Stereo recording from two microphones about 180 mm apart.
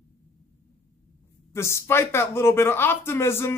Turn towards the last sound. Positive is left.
turn(degrees=15)  # may be behind; listen again after turning